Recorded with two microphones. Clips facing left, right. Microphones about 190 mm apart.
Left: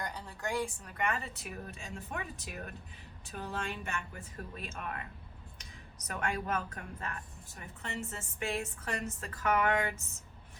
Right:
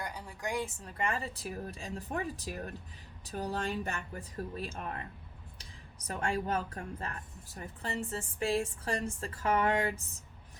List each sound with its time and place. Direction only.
0.0 s a woman's voice: 10° right (ahead or behind); by 5.0 s 30° right (ahead or behind)
6.1 s a woman's voice: 30° right (ahead or behind)